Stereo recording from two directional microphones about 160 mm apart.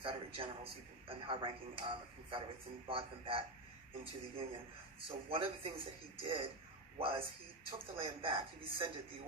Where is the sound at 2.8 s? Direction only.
35° right (ahead or behind).